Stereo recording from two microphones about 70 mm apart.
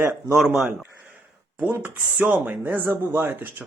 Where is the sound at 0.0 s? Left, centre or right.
Right.